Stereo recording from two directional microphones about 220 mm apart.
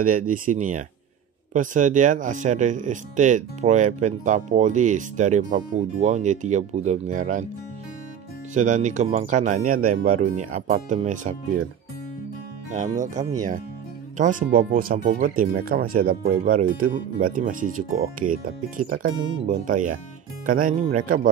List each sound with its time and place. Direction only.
0.0 s speech: 40° right (ahead or behind)
8.5 s speech: 35° right (ahead or behind)
12.7 s speech: 35° right (ahead or behind)